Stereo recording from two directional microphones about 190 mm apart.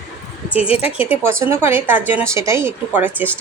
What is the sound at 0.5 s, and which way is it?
Speech, 30° left (ahead or behind).